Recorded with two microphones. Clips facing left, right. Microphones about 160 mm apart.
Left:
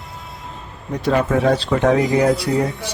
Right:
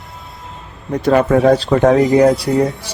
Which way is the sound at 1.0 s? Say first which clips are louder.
Right 5 dB; 50° right (ahead or behind).